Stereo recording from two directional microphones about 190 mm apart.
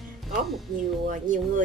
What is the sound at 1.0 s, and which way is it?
Speech, 45° right (ahead or behind).